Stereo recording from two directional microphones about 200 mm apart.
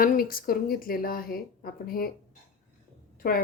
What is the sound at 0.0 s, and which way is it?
A woman's voice, 45° left (ahead or behind).